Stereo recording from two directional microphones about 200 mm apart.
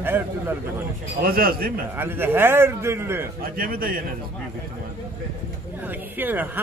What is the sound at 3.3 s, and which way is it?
Speech, 50° right (ahead or behind).